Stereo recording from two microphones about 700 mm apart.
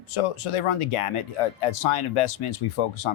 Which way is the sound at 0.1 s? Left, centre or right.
Left.